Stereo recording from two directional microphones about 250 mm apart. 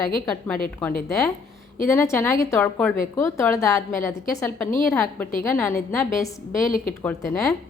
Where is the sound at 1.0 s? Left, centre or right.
Centre.